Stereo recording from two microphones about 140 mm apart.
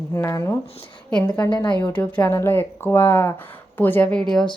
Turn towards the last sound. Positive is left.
turn(degrees=5)  # may be behind; listen again after turning